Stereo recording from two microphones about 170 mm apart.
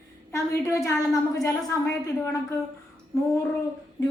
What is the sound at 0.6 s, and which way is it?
A woman's voice, 15° left (ahead or behind).